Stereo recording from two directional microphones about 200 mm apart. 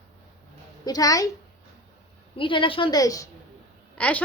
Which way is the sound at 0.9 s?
20° left (ahead or behind).